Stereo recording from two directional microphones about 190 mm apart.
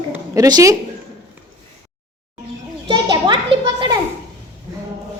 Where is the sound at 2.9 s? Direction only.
25° right (ahead or behind).